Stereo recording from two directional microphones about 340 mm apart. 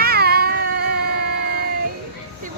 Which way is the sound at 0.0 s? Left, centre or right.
Right.